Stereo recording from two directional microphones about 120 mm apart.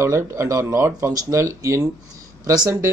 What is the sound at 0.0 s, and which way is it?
Speech, 25° right (ahead or behind).